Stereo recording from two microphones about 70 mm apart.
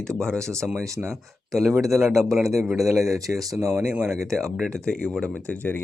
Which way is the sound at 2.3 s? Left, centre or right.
Centre.